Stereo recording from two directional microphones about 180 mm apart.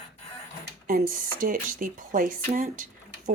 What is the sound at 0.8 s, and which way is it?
Speech, 50° right (ahead or behind).